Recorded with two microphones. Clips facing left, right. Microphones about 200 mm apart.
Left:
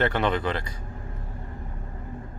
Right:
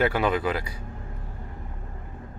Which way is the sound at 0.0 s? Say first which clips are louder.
Right 1 dB; 5° right (ahead or behind).